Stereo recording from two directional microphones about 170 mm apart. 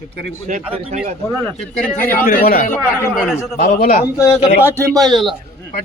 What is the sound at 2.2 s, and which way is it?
A man's voice, 60° left (ahead or behind).